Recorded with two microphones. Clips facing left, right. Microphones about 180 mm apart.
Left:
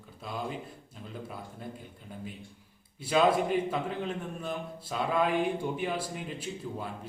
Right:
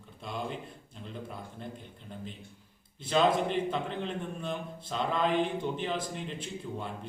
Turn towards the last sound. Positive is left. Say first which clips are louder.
# even
turn(degrees=5)  # may be behind; listen again after turning